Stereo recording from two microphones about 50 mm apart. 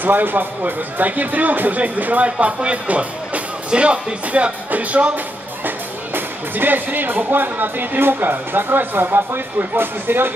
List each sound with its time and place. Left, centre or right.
0.0 s speech: right
2.2 s speech: right
4.6 s music: right
6.1 s speech: right